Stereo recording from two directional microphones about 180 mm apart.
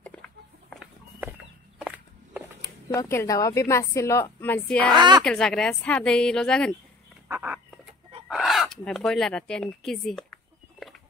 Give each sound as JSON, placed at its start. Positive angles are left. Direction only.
{"t": 1.8, "sound": "a sound", "side_deg": -5}
{"t": 2.6, "sound": "speech", "side_deg": 20}
{"t": 4.9, "sound": "a woman's voice", "side_deg": -25}
{"t": 5.2, "sound": "a woman's voice", "side_deg": 5}
{"t": 7.2, "sound": "a sound", "side_deg": -10}
{"t": 8.3, "sound": "speech", "side_deg": 0}